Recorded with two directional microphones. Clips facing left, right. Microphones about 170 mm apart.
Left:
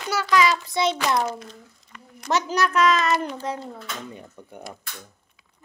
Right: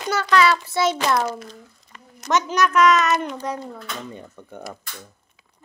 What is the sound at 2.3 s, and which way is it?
Speech, 30° left (ahead or behind).